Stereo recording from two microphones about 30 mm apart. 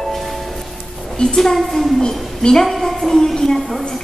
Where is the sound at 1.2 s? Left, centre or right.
Centre.